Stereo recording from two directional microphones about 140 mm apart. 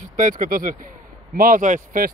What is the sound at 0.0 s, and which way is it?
Speech, 70° right (ahead or behind).